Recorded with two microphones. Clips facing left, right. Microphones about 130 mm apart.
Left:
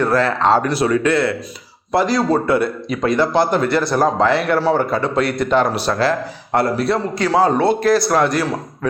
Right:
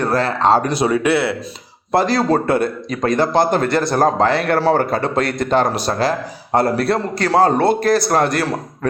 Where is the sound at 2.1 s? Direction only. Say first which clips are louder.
Even; 50° right (ahead or behind).